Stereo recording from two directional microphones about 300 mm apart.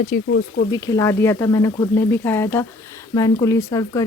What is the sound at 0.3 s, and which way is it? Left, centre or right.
Speech, left.